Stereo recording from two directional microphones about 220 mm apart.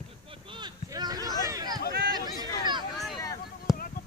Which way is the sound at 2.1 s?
20° right (ahead or behind).